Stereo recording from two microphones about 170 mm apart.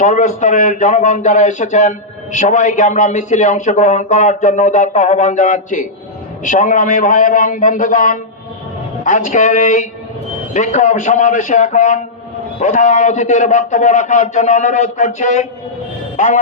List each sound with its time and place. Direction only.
0.0 s speech: 45° left (ahead or behind)
16.1 s music: 45° left (ahead or behind)